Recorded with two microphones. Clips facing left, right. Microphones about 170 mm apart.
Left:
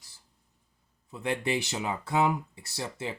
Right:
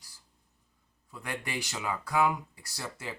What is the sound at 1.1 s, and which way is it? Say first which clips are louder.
Speech: left 7 dB; 25° left (ahead or behind).